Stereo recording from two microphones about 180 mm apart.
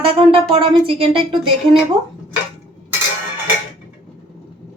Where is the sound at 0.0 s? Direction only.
30° right (ahead or behind).